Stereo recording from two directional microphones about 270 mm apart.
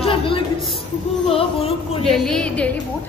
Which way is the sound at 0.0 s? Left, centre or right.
Centre.